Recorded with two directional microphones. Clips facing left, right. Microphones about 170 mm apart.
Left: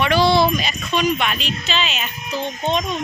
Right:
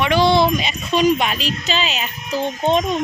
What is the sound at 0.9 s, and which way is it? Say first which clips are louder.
Speech: right 4 dB; 35° right (ahead or behind).